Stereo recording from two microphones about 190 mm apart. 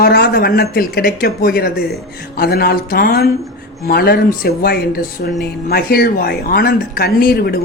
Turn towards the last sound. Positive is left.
turn(degrees=55)  # may be behind; listen again after turning